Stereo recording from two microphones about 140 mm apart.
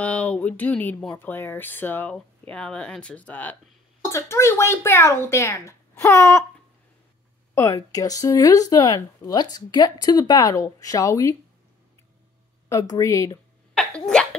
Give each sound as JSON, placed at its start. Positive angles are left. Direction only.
{"t": 0.0, "sound": "speech", "side_deg": 10}
{"t": 7.5, "sound": "speech", "side_deg": 25}
{"t": 12.6, "sound": "speech", "side_deg": 25}
{"t": 13.7, "sound": "sneeze", "side_deg": 5}